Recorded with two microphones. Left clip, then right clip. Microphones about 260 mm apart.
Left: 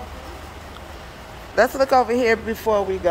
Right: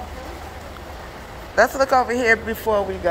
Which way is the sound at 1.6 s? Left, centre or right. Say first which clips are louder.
Even; left.